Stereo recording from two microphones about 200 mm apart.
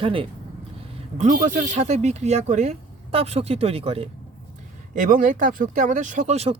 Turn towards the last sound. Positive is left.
turn(degrees=-30)  # may be behind; listen again after turning